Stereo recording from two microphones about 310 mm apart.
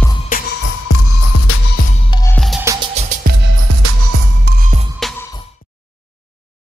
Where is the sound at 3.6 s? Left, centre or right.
Right.